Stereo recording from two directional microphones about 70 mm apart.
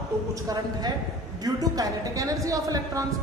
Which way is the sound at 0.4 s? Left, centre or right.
Right.